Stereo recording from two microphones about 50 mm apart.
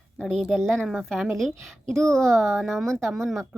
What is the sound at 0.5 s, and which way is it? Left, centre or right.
A woman's voice, centre.